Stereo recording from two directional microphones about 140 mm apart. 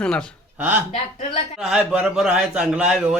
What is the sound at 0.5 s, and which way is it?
Speech, 10° right (ahead or behind).